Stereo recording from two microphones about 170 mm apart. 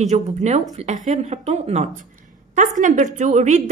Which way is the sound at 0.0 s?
40° right (ahead or behind).